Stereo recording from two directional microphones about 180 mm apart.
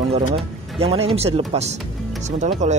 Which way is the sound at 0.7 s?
35° right (ahead or behind).